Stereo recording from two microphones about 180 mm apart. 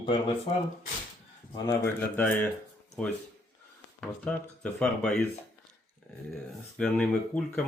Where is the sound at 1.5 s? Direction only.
20° left (ahead or behind).